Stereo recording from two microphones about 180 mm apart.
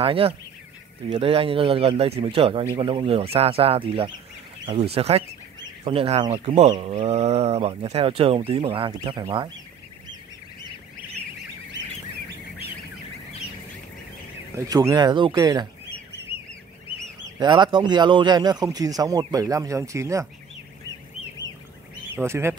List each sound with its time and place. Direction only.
0.0 s speech: 30° right (ahead or behind)
14.5 s speech: 20° right (ahead or behind)
17.4 s speech: 25° right (ahead or behind)
22.1 s speech: 15° right (ahead or behind)